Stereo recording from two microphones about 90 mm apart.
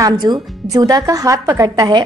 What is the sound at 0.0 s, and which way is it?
A woman's voice, 45° right (ahead or behind).